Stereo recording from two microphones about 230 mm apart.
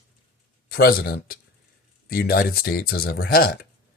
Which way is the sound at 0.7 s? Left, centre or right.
Left.